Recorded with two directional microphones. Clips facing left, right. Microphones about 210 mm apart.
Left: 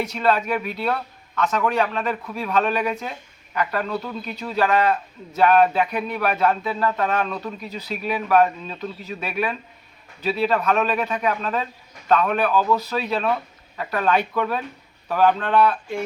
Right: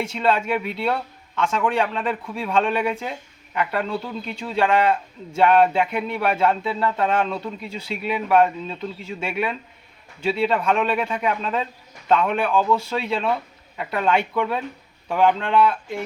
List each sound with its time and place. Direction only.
0.0 s a man's voice: 25° right (ahead or behind)